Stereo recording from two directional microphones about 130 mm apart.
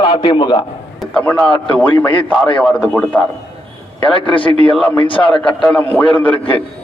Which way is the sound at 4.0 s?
40° left (ahead or behind).